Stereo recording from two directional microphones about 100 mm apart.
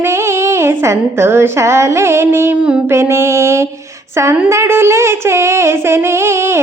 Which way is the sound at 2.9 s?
30° right (ahead or behind).